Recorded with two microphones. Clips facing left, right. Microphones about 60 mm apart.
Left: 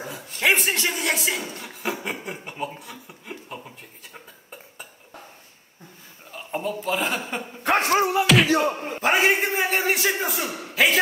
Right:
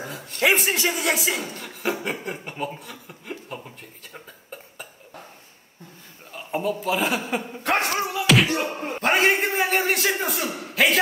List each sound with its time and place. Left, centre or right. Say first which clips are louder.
0.0 s a man's voice: right 1 dB; centre
6.3 s speech: right 2 dB; centre
7.6 s speech: left 2 dB; centre
7.9 s music: left 6 dB; left
8.7 s a sound: even; centre
9.1 s a man's voice: even; centre